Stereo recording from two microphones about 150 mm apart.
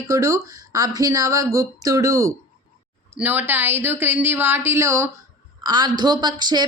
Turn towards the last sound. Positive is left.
turn(degrees=-30)  # may be behind; listen again after turning